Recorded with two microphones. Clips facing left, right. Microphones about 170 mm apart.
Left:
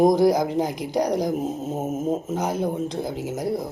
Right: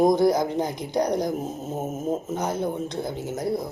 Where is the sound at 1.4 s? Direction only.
20° left (ahead or behind).